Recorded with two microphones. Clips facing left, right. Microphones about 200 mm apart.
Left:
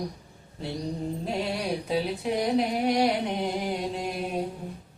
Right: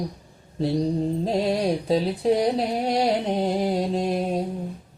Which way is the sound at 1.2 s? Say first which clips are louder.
Right 6 dB; 35° right (ahead or behind).